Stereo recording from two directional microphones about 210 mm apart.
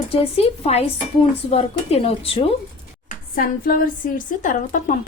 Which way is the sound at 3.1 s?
40° left (ahead or behind).